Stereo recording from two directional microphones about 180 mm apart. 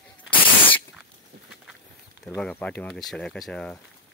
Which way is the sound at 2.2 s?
5° left (ahead or behind).